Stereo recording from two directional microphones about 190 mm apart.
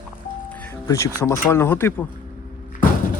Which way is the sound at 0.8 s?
15° left (ahead or behind).